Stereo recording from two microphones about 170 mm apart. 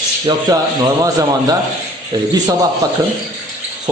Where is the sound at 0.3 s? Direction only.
30° right (ahead or behind).